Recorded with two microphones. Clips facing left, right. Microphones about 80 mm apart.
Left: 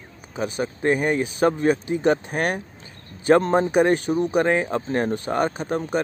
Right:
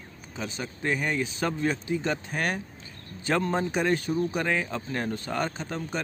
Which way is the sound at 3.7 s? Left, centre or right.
Left.